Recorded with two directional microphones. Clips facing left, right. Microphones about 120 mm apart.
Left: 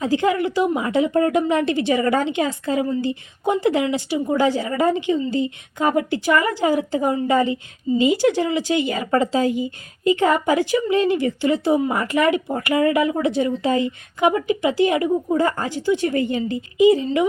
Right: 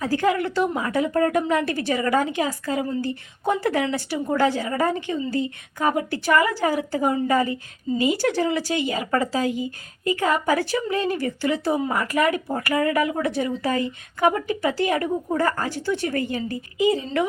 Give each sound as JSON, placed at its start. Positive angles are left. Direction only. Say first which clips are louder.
{"t": 0.0, "sound": "speech", "louder": "left 2 dB", "side_deg": 20}